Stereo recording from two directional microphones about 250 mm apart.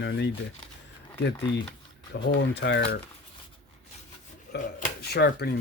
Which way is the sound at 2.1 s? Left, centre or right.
Left.